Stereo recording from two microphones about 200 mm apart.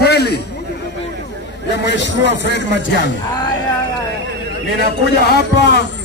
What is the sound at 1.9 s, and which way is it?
Speech, 60° left (ahead or behind).